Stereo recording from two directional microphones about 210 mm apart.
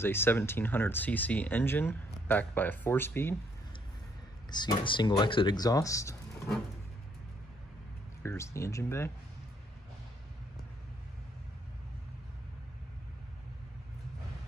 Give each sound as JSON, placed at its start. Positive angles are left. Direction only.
{"t": 0.0, "sound": "speech", "side_deg": 10}
{"t": 4.5, "sound": "speech", "side_deg": 20}
{"t": 8.2, "sound": "speech", "side_deg": 15}